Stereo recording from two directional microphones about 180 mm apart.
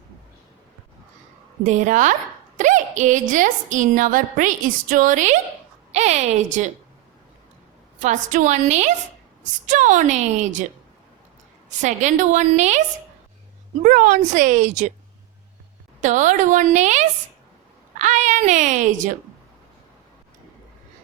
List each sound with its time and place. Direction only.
1.6 s a woman's voice: 45° right (ahead or behind)
7.9 s a woman's voice: 45° right (ahead or behind)
11.8 s a woman's voice: 40° right (ahead or behind)
13.8 s a woman's voice: 45° right (ahead or behind)
16.0 s a woman's voice: 45° right (ahead or behind)